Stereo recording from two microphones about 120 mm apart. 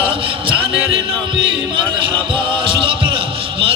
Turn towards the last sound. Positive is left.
turn(degrees=-45)  # may be behind; listen again after turning